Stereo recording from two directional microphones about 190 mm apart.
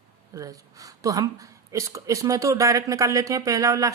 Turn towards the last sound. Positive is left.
turn(degrees=-15)  # may be behind; listen again after turning